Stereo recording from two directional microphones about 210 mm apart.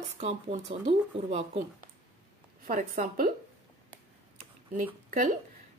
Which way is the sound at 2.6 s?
40° right (ahead or behind).